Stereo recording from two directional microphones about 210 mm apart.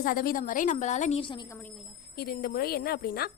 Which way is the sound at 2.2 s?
45° left (ahead or behind).